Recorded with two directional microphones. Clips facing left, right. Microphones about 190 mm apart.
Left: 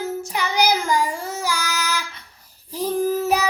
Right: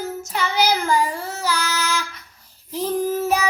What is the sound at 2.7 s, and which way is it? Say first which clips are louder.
Female singing: left 1 dB; 10° left (ahead or behind).